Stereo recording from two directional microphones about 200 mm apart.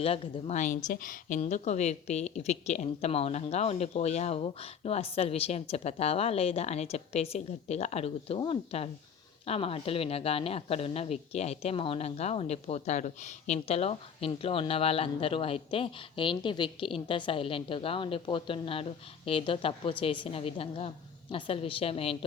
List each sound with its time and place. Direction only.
0.0 s a woman's voice: 30° left (ahead or behind)